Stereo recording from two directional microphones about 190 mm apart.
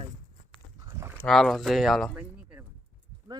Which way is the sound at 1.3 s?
Centre (ahead or behind).